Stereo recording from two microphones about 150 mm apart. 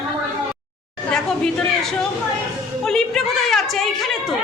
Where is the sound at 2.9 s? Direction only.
5° left (ahead or behind).